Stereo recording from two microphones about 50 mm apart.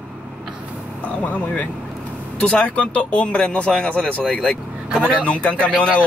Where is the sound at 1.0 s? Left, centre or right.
Left.